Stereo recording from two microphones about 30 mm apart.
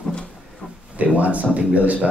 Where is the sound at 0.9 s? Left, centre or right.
Right.